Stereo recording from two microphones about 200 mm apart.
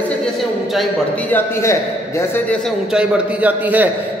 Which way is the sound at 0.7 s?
5° left (ahead or behind).